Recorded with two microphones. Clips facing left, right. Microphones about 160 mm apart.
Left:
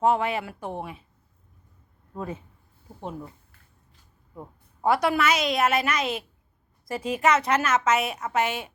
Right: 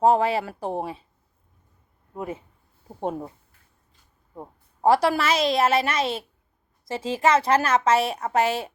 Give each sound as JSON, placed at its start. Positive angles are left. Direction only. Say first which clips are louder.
{"t": 0.0, "sound": "a woman's voice", "louder": "right 4 dB", "side_deg": -35}
{"t": 2.1, "sound": "speech", "louder": "right 2 dB", "side_deg": -20}
{"t": 4.4, "sound": "a woman's voice", "louder": "right 2 dB", "side_deg": -35}